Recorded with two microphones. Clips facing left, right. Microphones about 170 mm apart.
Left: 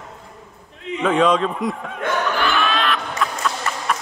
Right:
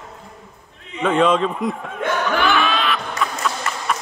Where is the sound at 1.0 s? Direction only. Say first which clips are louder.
Right 1 dB; centre (ahead or behind).